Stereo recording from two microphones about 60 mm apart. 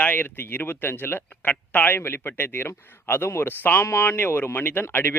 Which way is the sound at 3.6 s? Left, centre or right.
Left.